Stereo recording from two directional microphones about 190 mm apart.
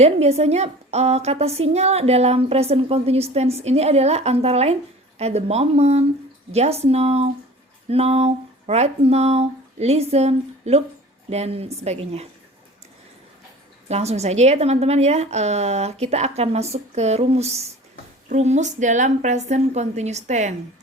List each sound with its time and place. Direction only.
0.0 s a woman's voice: 35° right (ahead or behind)
13.8 s a woman's voice: 35° right (ahead or behind)